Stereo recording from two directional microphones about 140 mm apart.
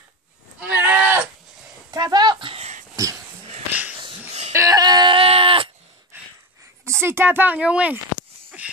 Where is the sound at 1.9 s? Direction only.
30° right (ahead or behind).